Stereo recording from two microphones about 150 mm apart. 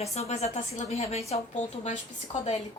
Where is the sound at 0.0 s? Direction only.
45° left (ahead or behind).